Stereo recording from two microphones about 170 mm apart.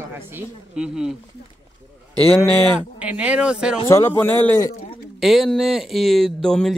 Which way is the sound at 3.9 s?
15° left (ahead or behind).